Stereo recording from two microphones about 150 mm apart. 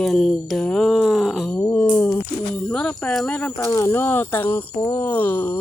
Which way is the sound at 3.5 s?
20° left (ahead or behind).